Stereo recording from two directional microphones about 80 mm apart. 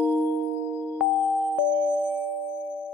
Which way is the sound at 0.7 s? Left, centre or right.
Left.